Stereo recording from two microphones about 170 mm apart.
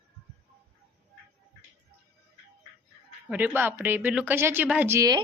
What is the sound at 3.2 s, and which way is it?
A woman's voice, 10° right (ahead or behind).